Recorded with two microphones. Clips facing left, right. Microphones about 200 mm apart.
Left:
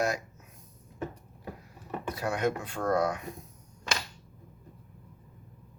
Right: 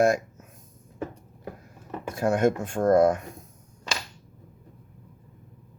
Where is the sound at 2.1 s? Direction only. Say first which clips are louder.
Right 8 dB; 50° right (ahead or behind).